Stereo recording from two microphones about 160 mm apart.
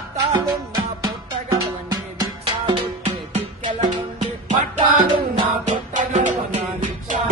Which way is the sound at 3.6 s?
50° right (ahead or behind).